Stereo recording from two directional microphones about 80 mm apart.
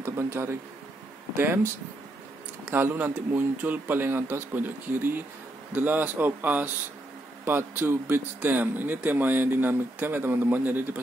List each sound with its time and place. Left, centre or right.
0.0 s speech: right
2.7 s speech: right